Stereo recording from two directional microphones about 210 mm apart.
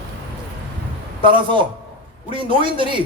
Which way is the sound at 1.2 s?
25° right (ahead or behind).